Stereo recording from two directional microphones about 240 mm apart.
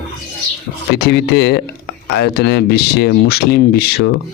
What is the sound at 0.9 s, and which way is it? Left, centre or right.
Speech, left.